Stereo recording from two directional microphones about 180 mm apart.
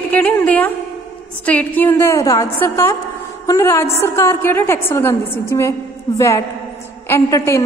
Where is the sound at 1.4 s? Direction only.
10° left (ahead or behind).